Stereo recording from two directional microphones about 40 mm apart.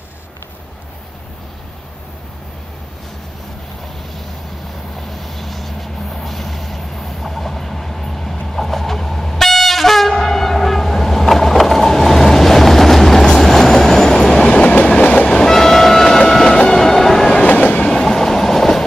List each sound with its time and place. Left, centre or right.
4.9 s vehicle: centre
14.5 s train: left
15.5 s train: centre
17.5 s train: left
17.7 s train: centre